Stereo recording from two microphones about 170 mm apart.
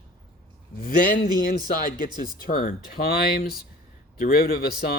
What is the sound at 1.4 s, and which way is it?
Speech, 55° left (ahead or behind).